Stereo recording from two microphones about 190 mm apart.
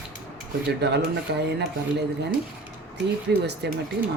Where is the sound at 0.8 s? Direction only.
60° right (ahead or behind).